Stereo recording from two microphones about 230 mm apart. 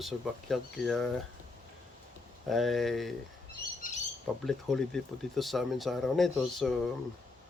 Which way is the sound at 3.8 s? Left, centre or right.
Left.